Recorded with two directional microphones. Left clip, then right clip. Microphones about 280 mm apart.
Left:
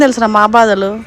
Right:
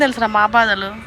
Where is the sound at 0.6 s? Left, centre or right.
Left.